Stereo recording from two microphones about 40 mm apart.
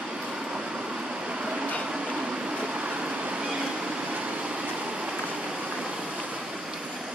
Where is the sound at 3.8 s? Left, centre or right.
Right.